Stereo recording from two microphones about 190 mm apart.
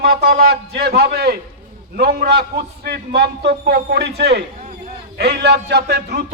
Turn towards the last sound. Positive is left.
turn(degrees=-60)  # may be behind; listen again after turning